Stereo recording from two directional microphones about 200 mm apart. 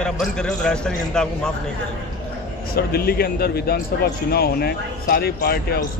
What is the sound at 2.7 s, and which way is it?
A man's voice, 50° left (ahead or behind).